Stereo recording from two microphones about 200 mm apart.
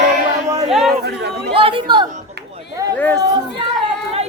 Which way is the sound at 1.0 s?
55° right (ahead or behind).